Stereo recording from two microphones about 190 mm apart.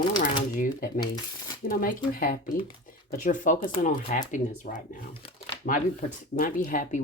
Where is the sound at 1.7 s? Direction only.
50° left (ahead or behind).